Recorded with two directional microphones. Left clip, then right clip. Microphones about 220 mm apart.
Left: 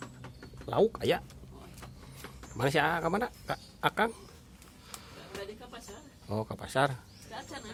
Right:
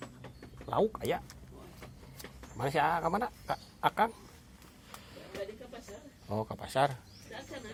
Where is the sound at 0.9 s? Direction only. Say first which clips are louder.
Left 4 dB; 35° left (ahead or behind).